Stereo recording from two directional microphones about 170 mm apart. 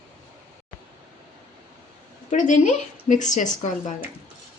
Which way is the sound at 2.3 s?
50° left (ahead or behind).